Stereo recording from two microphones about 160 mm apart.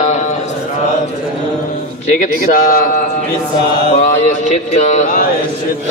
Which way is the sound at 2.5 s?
55° left (ahead or behind).